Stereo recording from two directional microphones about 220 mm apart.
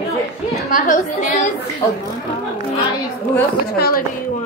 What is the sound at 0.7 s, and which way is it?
Speech, 35° left (ahead or behind).